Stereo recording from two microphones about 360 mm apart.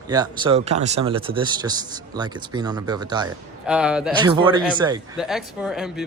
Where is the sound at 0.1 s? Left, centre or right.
Centre.